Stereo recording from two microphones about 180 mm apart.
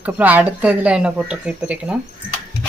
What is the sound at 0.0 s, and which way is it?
Speech, 10° right (ahead or behind).